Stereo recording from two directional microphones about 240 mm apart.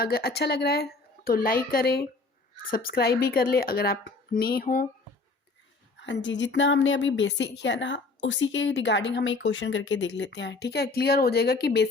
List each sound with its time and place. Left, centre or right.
0.0 s a woman's voice: left
6.0 s a woman's voice: left